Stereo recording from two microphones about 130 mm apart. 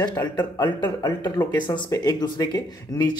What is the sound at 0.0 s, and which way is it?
Speech, 30° left (ahead or behind).